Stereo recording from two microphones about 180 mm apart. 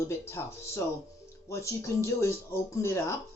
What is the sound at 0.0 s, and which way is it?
Speech, 15° left (ahead or behind).